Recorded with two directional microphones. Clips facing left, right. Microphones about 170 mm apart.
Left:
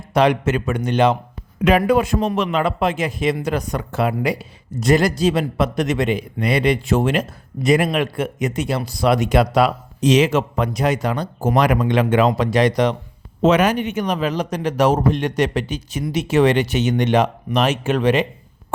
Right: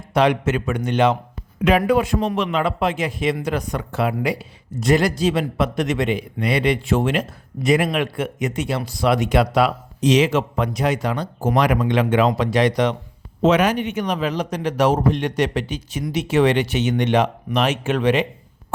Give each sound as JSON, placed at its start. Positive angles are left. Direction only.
{"t": 0.1, "sound": "a man's voice", "side_deg": 40}